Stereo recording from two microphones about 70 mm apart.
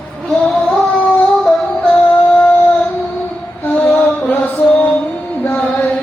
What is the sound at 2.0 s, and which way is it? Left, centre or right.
Music, left.